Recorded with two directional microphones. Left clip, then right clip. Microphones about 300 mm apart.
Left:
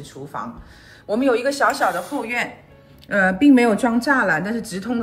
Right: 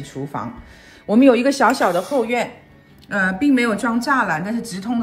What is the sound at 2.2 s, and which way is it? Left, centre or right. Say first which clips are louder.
A woman's voice: right 3 dB; centre.